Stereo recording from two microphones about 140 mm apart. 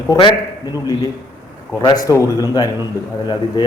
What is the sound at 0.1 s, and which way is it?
Speech, 35° left (ahead or behind).